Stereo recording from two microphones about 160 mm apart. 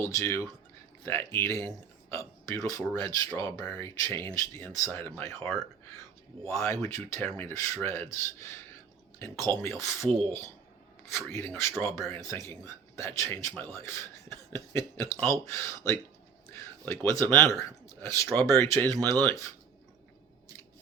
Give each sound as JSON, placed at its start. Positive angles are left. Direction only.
{"t": 0.0, "sound": "a man's voice", "side_deg": 20}
{"t": 6.5, "sound": "a man's voice", "side_deg": 20}
{"t": 11.1, "sound": "a man's voice", "side_deg": 15}